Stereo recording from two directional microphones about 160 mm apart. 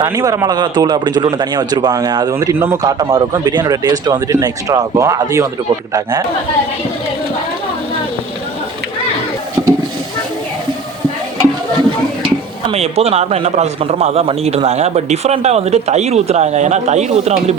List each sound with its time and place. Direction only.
0.0 s speech: 20° right (ahead or behind)
9.6 s a sound: 10° right (ahead or behind)
12.7 s a man's voice: 40° right (ahead or behind)